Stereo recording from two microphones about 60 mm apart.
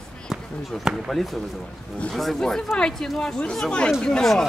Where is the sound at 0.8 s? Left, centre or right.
Centre.